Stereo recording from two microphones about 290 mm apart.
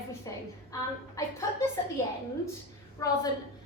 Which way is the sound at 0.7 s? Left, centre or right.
Centre.